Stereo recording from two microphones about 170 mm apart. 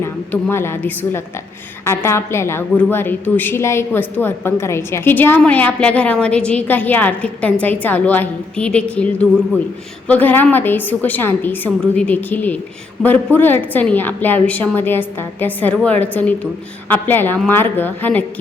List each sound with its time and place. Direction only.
0.0 s a woman's voice: 10° left (ahead or behind)